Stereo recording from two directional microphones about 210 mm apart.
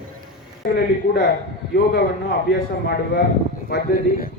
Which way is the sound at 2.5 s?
50° left (ahead or behind).